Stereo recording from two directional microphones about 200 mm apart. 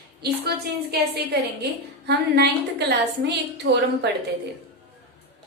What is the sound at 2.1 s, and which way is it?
A woman's voice, 55° right (ahead or behind).